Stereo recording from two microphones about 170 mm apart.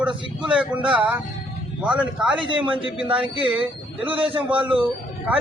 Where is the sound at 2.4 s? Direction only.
30° right (ahead or behind).